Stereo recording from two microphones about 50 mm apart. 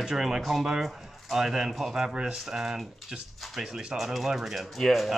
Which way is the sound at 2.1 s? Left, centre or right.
Centre.